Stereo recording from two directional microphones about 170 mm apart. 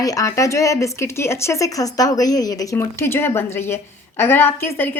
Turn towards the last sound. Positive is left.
turn(degrees=10)  # may be behind; listen again after turning